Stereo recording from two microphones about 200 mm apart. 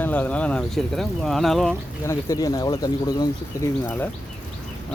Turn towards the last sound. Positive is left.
turn(degrees=15)  # may be behind; listen again after turning